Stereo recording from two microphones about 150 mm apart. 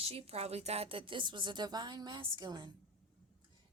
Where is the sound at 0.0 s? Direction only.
40° right (ahead or behind).